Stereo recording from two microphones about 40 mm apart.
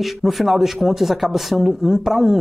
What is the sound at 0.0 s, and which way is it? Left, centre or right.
Speech, centre.